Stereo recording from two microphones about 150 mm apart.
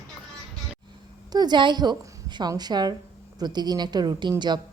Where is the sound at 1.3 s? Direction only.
30° right (ahead or behind).